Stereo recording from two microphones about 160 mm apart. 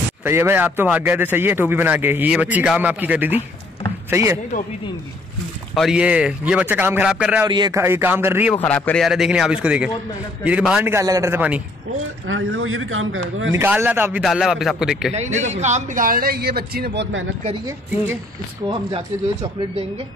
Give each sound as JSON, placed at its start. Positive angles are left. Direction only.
{"t": 0.2, "sound": "a man's voice", "side_deg": -15}
{"t": 5.8, "sound": "a man's voice", "side_deg": -5}
{"t": 7.4, "sound": "speech", "side_deg": -25}
{"t": 7.8, "sound": "a man's voice", "side_deg": -15}
{"t": 8.5, "sound": "a man's voice", "side_deg": 10}
{"t": 9.0, "sound": "a man's voice", "side_deg": -5}
{"t": 10.9, "sound": "a man's voice", "side_deg": -20}
{"t": 13.5, "sound": "a man's voice", "side_deg": -15}
{"t": 14.2, "sound": "a man's voice", "side_deg": 0}
{"t": 15.1, "sound": "speech", "side_deg": -45}
{"t": 18.7, "sound": "speech", "side_deg": -30}